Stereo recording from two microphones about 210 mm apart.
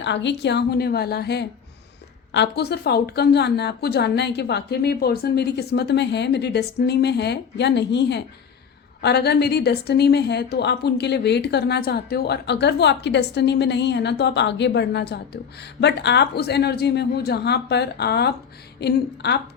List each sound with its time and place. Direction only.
0.0 s a woman's voice: 55° left (ahead or behind)